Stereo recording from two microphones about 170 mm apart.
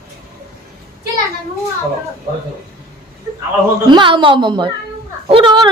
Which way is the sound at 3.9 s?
30° right (ahead or behind).